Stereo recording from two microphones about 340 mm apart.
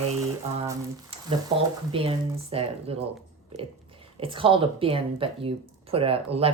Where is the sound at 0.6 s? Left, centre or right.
Centre.